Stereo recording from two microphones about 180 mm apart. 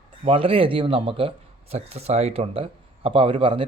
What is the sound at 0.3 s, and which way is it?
Speech, 30° right (ahead or behind).